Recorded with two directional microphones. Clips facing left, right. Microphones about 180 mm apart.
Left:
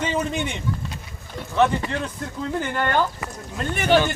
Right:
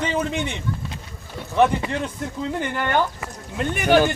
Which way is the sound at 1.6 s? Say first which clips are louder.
Right 1 dB; 20° right (ahead or behind).